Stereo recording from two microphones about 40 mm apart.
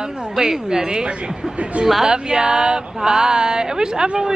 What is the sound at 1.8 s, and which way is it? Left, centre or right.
Speech, centre.